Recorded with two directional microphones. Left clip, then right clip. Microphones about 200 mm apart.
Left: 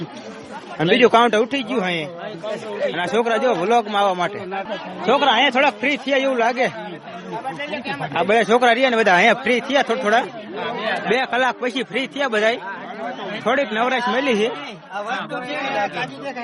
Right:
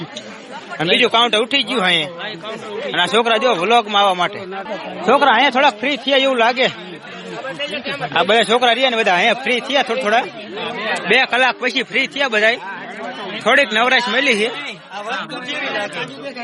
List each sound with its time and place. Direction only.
0.8 s a man's voice: 25° left (ahead or behind)
1.5 s a man's voice: 10° left (ahead or behind)
4.7 s a man's voice: 15° right (ahead or behind)
8.1 s a man's voice: 5° left (ahead or behind)
8.5 s a man's voice: 20° left (ahead or behind)
11.1 s a man's voice: 5° left (ahead or behind)